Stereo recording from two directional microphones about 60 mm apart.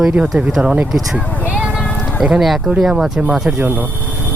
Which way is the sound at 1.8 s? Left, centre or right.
Centre.